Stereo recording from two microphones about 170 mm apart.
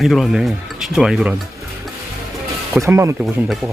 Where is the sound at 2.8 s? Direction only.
15° right (ahead or behind).